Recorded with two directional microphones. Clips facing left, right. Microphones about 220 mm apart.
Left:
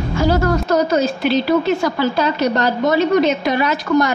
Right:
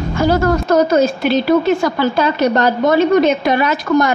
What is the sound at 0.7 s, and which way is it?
A woman's voice, 50° right (ahead or behind).